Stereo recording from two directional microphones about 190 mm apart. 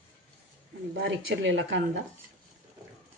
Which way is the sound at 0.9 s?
75° right (ahead or behind).